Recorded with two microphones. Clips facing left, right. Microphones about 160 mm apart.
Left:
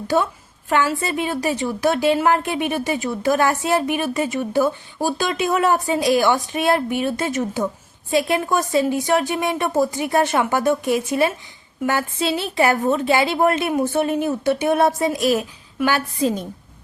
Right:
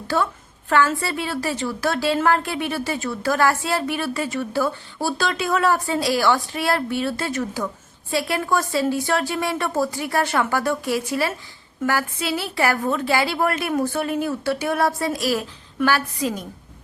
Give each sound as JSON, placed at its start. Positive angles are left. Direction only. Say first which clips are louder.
{"t": 0.1, "sound": "a woman's voice", "louder": "left 3 dB", "side_deg": 20}